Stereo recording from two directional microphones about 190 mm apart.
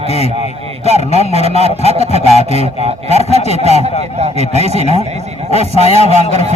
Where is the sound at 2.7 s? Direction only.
35° right (ahead or behind).